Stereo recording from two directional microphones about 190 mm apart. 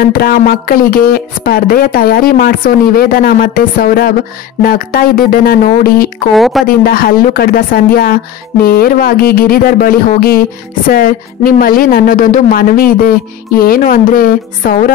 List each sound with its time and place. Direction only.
0.0 s speech: 50° left (ahead or behind)
6.3 s speech: centre (ahead or behind)
6.7 s speech: 50° left (ahead or behind)